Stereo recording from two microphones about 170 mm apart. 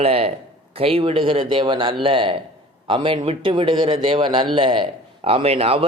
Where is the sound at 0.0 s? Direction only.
35° right (ahead or behind).